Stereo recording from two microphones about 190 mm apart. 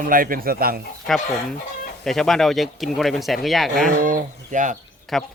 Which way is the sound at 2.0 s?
Centre (ahead or behind).